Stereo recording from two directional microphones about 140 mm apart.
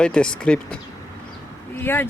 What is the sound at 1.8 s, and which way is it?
Speech, 15° left (ahead or behind).